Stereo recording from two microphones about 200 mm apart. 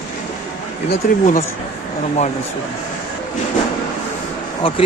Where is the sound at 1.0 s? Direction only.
45° left (ahead or behind).